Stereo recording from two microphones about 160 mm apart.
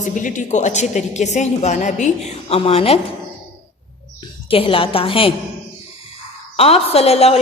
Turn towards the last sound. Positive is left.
turn(degrees=40)  # may be behind; listen again after turning